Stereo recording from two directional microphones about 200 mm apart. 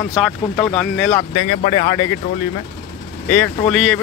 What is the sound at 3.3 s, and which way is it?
Speech, 10° left (ahead or behind).